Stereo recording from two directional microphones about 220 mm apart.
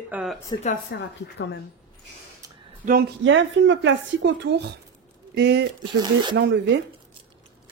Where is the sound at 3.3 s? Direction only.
55° right (ahead or behind).